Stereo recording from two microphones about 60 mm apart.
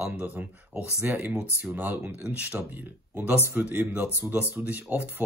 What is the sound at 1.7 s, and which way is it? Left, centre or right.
Speech, right.